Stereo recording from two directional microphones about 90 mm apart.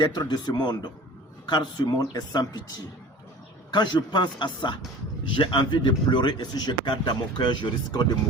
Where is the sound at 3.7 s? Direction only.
55° left (ahead or behind).